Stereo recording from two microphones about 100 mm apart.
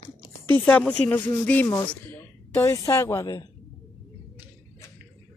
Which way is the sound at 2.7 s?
30° left (ahead or behind).